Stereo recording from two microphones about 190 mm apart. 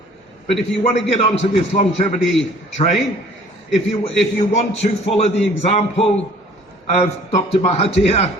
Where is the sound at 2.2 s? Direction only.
Centre (ahead or behind).